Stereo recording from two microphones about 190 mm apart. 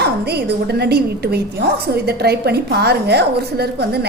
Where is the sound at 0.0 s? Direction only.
60° right (ahead or behind).